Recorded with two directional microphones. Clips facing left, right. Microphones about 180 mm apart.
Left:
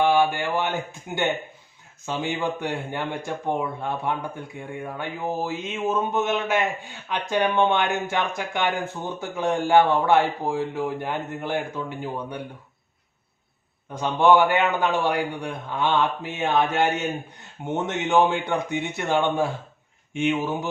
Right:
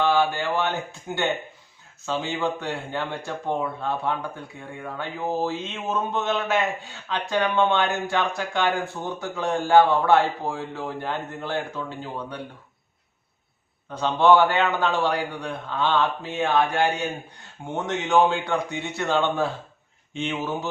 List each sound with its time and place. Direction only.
0.0 s a man's voice: 15° left (ahead or behind)
2.0 s a man's voice: 15° left (ahead or behind)
14.0 s a man's voice: 15° left (ahead or behind)